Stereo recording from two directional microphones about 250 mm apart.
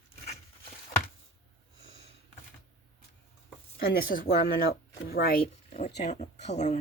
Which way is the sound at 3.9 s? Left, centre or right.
Left.